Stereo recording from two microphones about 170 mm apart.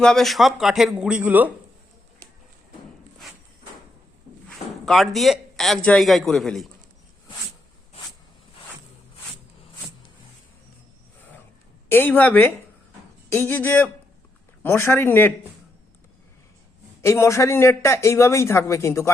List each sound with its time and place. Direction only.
0.0 s speech: 5° left (ahead or behind)
4.4 s a man's voice: centre (ahead or behind)
11.9 s speech: 10° left (ahead or behind)
17.0 s speech: 15° left (ahead or behind)